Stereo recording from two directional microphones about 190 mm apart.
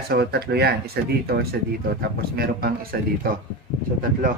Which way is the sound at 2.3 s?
55° right (ahead or behind).